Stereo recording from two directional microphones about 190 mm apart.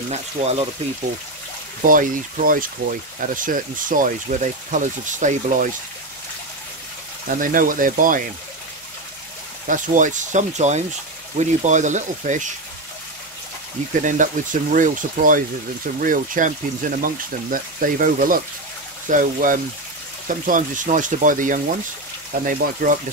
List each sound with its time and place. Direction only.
0.1 s speech: 35° right (ahead or behind)
1.8 s speech: 45° right (ahead or behind)
7.2 s speech: 45° right (ahead or behind)
9.7 s speech: 40° right (ahead or behind)
14.0 s speech: 45° right (ahead or behind)